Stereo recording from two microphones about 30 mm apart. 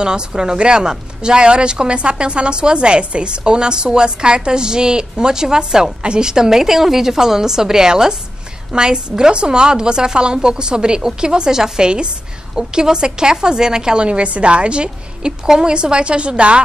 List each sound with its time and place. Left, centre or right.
0.0 s a woman's voice: right
14.0 s a woman's voice: right